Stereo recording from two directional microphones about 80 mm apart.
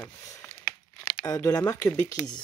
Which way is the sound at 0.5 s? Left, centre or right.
Left.